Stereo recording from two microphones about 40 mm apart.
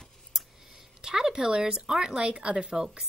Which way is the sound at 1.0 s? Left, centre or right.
Centre.